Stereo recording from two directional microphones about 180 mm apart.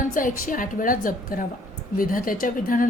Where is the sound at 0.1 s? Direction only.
50° left (ahead or behind).